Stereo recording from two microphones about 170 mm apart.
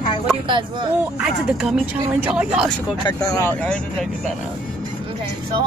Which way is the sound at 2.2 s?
5° right (ahead or behind).